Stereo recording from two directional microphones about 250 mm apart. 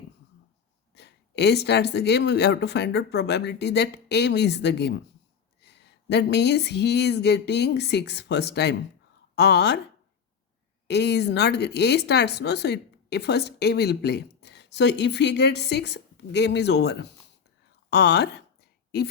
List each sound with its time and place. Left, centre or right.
0.9 s speech: left
10.8 s speech: left